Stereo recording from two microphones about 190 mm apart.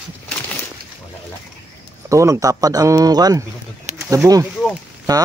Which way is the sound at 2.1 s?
15° right (ahead or behind).